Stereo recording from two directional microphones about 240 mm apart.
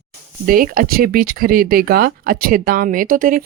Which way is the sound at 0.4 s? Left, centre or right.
Right.